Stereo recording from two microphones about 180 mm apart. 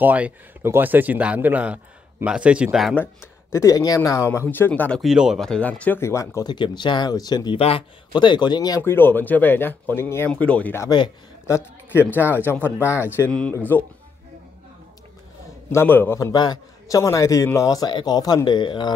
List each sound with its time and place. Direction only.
0.0 s speech: 10° right (ahead or behind)
3.0 s speech: 15° left (ahead or behind)
5.0 s a man's voice: 5° right (ahead or behind)
15.7 s a man's voice: 10° left (ahead or behind)